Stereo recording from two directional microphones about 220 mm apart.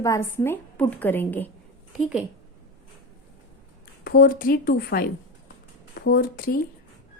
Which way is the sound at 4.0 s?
40° left (ahead or behind).